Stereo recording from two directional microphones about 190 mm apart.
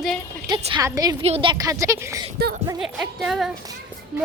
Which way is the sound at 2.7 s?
Centre (ahead or behind).